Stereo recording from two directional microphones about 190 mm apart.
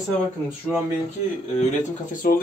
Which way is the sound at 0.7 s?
5° left (ahead or behind).